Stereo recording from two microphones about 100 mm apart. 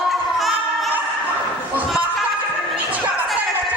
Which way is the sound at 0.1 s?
Centre (ahead or behind).